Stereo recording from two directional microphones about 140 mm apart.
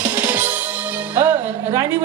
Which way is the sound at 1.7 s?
20° right (ahead or behind).